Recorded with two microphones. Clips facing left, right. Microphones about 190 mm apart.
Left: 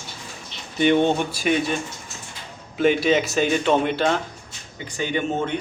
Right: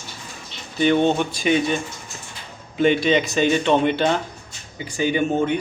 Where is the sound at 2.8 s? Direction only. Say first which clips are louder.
Right 1 dB; 5° left (ahead or behind).